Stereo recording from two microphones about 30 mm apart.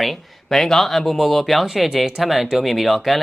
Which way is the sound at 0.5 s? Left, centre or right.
Centre.